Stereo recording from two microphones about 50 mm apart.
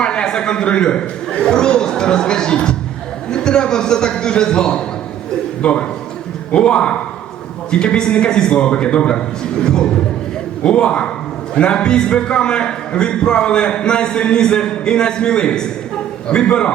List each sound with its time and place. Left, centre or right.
0.0 s a man's voice: centre